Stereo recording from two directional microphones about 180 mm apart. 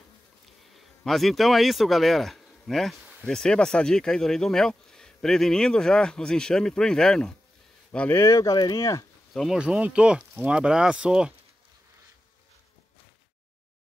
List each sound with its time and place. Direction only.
0.7 s speech: centre (ahead or behind)
8.2 s speech: 20° left (ahead or behind)
9.3 s speech: centre (ahead or behind)